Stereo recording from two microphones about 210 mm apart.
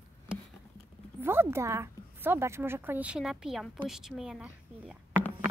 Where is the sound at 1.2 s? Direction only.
10° right (ahead or behind).